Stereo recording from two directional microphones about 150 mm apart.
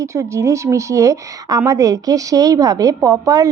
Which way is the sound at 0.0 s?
20° right (ahead or behind).